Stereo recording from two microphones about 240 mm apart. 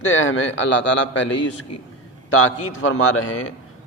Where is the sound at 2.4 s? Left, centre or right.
Left.